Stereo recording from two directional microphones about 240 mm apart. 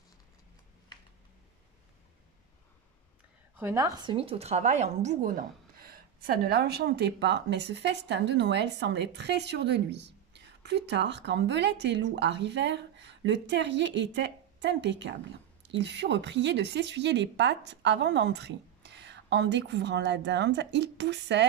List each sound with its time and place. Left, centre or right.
3.5 s a woman's voice: centre; by 21.5 s right